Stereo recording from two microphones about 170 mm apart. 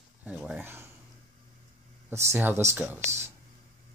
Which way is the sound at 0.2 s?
5° right (ahead or behind).